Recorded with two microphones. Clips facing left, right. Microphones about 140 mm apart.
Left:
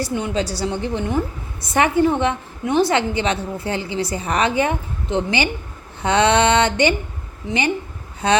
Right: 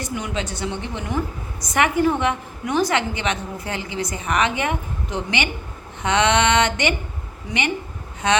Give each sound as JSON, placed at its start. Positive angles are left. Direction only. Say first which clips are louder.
{"t": 0.0, "sound": "a woman's voice", "louder": "left 5 dB", "side_deg": 30}
{"t": 8.2, "sound": "a woman's voice", "louder": "left 2 dB", "side_deg": 35}